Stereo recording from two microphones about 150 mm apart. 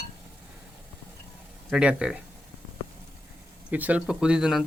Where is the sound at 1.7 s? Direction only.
5° right (ahead or behind).